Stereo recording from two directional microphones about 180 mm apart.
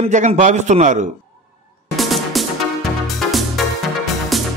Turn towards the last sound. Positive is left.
turn(degrees=0)  # may be behind; listen again after turning